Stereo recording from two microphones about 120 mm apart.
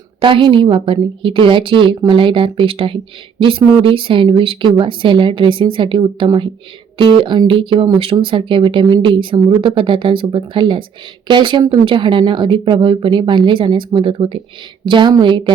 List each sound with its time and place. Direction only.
0.2 s speech: 45° right (ahead or behind)